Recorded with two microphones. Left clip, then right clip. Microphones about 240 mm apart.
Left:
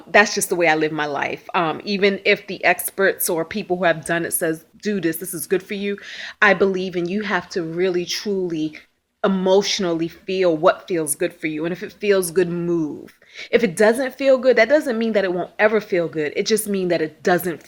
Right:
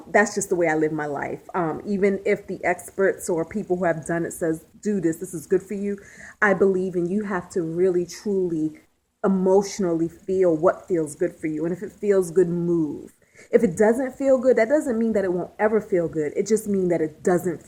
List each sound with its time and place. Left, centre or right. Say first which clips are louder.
0.4 s a woman's voice: left 4 dB; left
9.6 s speech: left 3 dB; centre
9.8 s a woman's voice: left 1 dB; left
16.4 s speech: left 2 dB; centre
16.6 s a woman's voice: left 2 dB; left